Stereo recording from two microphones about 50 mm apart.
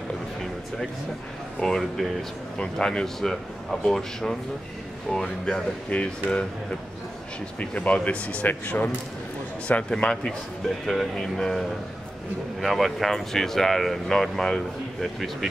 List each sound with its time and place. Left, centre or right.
1.6 s speech: centre
2.5 s a man's voice: centre
8.5 s speech: left
9.8 s a man's voice: centre
12.5 s speech: centre